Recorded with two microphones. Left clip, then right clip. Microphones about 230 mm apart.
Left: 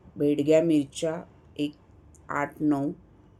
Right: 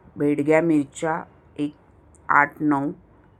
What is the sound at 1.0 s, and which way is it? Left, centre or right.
Speech, centre.